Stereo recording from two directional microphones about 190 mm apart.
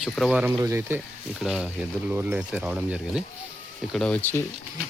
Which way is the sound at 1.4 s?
Centre (ahead or behind).